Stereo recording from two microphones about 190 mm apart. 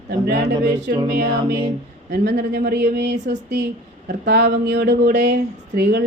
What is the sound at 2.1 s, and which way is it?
Speech, 60° right (ahead or behind).